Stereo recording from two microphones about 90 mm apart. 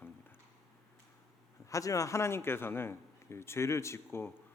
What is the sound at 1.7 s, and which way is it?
A man's voice, 40° left (ahead or behind).